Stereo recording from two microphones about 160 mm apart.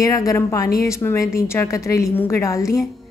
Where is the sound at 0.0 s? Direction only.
20° left (ahead or behind).